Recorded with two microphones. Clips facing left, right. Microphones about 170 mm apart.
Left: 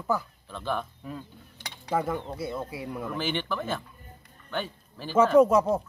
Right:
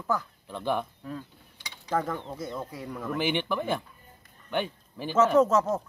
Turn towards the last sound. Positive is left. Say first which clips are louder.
# left 3 dB
turn(degrees=10)  # may be behind; listen again after turning